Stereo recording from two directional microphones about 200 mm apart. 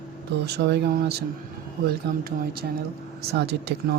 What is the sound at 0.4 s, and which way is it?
Speech, 55° right (ahead or behind).